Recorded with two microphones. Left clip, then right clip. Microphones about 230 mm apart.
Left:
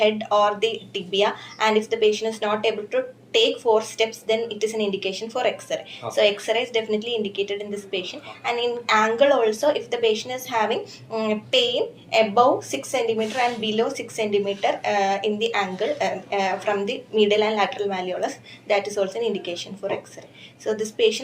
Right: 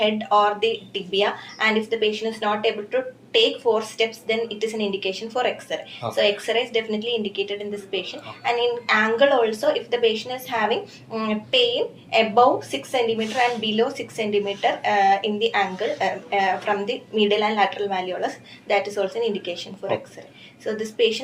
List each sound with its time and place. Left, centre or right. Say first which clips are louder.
0.0 s a woman's voice: even; left
20.7 s a woman's voice: left 1 dB; left